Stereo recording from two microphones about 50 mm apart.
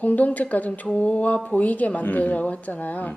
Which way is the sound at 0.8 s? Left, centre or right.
Centre.